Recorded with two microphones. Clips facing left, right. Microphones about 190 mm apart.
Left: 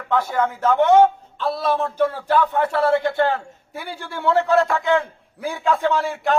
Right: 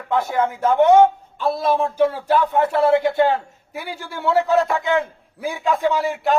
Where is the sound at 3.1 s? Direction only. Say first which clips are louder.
Right 2 dB; 20° right (ahead or behind).